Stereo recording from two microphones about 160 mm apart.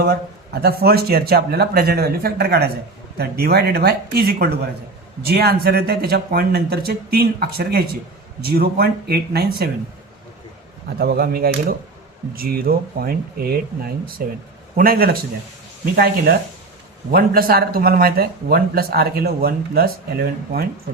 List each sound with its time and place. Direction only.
0.0 s speech: 80° right
11.0 s speech: 70° right (ahead or behind)